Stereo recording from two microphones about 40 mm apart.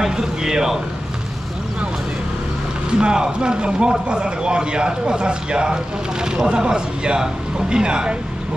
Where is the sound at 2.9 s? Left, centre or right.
Centre.